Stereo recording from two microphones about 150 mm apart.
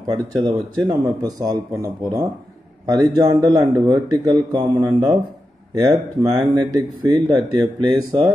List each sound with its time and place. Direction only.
0.1 s speech: 25° right (ahead or behind)